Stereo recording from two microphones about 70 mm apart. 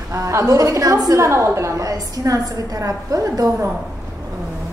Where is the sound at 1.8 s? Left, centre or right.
Right.